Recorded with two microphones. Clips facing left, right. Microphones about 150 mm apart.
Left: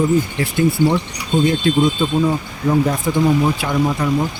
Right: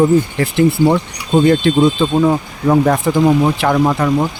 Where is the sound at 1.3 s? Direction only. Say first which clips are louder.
Right 4 dB; 80° right; by 4.0 s 65° right (ahead or behind).